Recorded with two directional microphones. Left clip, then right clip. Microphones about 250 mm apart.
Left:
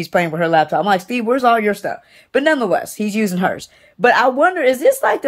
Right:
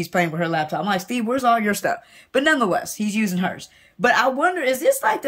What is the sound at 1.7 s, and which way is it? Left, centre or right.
A woman's voice, centre.